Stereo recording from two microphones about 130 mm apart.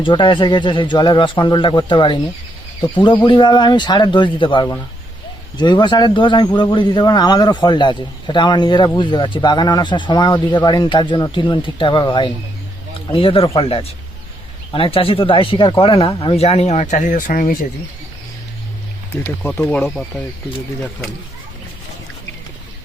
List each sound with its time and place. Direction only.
0.0 s speech: 40° left (ahead or behind)
3.2 s speech: 35° left (ahead or behind); by 17.7 s 90° left
19.1 s speech: 15° left (ahead or behind)
19.7 s speech: 5° left (ahead or behind)